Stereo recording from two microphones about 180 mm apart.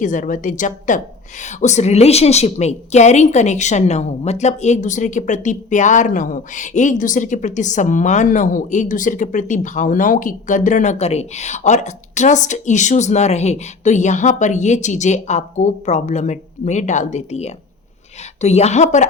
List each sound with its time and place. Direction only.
0.0 s a woman's voice: 45° left (ahead or behind)